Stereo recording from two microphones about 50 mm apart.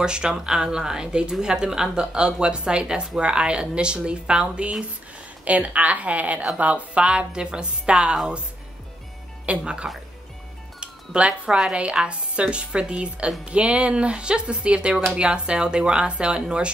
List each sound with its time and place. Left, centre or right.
0.0 s speech: centre
9.5 s speech: right
10.8 s music: right
11.7 s speech: right